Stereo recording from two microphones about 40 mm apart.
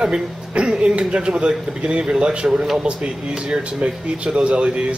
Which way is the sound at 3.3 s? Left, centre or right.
Centre.